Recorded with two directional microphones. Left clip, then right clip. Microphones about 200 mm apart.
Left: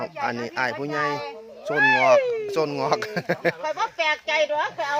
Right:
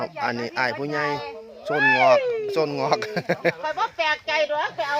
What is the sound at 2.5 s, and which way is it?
Speech, 10° left (ahead or behind).